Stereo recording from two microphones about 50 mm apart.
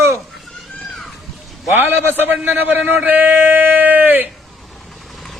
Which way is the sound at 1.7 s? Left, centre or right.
Right.